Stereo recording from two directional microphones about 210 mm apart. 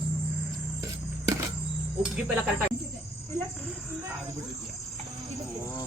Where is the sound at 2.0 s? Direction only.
5° right (ahead or behind).